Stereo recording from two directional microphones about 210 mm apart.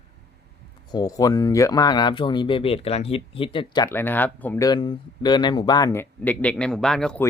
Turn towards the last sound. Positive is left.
turn(degrees=5)  # may be behind; listen again after turning